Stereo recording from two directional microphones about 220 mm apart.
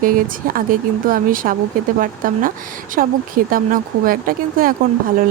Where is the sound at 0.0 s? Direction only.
40° right (ahead or behind).